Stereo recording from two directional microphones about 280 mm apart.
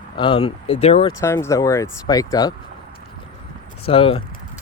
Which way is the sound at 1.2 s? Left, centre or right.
Centre.